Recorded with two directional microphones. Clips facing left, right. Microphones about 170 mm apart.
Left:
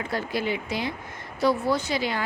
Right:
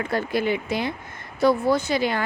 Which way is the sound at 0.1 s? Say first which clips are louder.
Right 4 dB; 55° right (ahead or behind).